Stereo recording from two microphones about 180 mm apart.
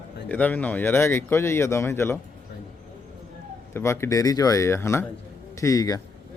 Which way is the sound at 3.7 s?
15° left (ahead or behind).